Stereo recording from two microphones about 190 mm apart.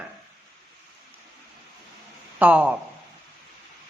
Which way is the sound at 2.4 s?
10° right (ahead or behind).